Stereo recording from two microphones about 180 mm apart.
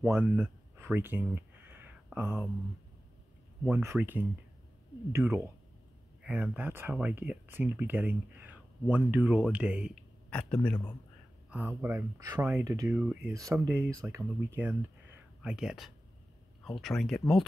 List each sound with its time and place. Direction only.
0.0 s a sound: 10° right (ahead or behind)
2.1 s speech: 10° right (ahead or behind)
3.6 s speech: 10° right (ahead or behind)
10.3 s a man's voice: 5° left (ahead or behind)
11.5 s speech: 10° right (ahead or behind)